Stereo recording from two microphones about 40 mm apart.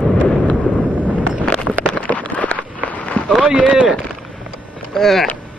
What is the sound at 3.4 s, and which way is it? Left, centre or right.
Speech, right.